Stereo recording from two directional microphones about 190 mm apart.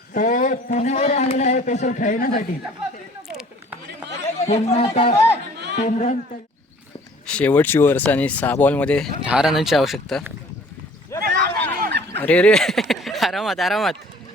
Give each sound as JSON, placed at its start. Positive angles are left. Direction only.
{"t": 0.1, "sound": "a man's voice", "side_deg": 40}
{"t": 4.4, "sound": "a man's voice", "side_deg": 35}
{"t": 7.3, "sound": "speech", "side_deg": 5}
{"t": 9.2, "sound": "speech", "side_deg": -5}
{"t": 11.2, "sound": "a sound", "side_deg": -65}
{"t": 12.1, "sound": "speech", "side_deg": 10}